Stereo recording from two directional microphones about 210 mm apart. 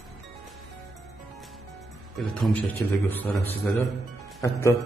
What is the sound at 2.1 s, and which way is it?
A man's voice, centre (ahead or behind).